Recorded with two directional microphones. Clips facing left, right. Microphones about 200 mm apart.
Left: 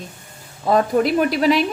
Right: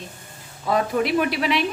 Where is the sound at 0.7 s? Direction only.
40° left (ahead or behind).